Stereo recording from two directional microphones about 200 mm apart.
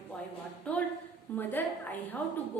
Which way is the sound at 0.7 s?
5° left (ahead or behind).